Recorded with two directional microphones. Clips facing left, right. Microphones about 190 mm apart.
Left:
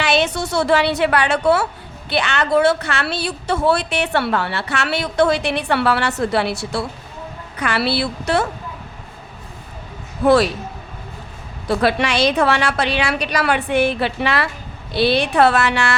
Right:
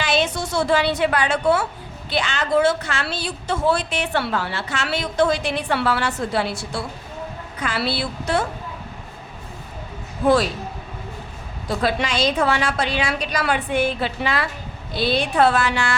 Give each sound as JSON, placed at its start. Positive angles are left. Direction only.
{"t": 0.0, "sound": "a woman's voice", "side_deg": 70}
{"t": 10.2, "sound": "a woman's voice", "side_deg": 70}
{"t": 11.7, "sound": "a woman's voice", "side_deg": 70}